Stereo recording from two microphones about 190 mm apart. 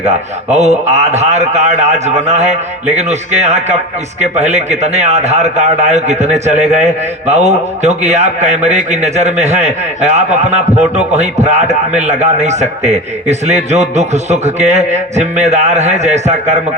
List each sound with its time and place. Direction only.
0.5 s a man's voice: 35° right (ahead or behind)